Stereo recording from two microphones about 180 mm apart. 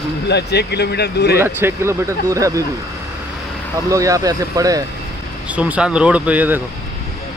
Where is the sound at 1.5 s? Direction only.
15° right (ahead or behind).